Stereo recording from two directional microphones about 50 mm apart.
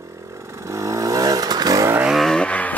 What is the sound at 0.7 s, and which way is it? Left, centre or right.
Vehicle, right.